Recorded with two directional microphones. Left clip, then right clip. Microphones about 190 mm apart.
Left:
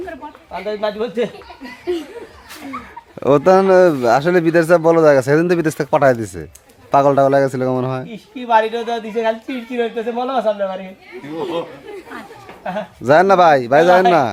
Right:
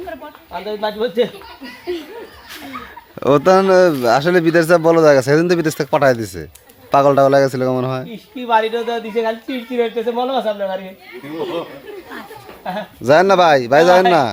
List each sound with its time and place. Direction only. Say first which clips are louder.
0.8 s speech: right 3 dB; 15° left (ahead or behind)
2.6 s speech: left 3 dB; centre (ahead or behind)
8.4 s speech: left 1 dB; 15° left (ahead or behind)
12.6 s speech: even; centre (ahead or behind)